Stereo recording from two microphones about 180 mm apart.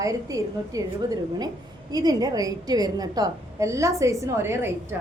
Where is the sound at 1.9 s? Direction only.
20° right (ahead or behind).